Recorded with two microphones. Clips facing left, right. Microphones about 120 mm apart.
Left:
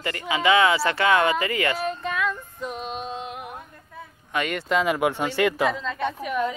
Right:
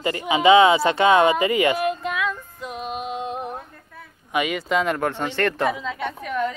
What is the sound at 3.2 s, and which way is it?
Music, 30° right (ahead or behind).